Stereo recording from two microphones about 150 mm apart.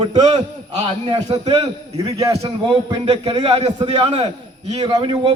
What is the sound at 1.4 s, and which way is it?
Speech, 45° right (ahead or behind).